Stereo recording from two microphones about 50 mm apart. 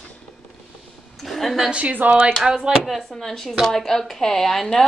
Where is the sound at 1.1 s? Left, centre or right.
Centre.